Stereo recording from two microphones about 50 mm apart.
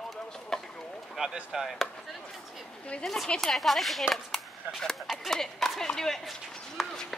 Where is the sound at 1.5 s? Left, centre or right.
Centre.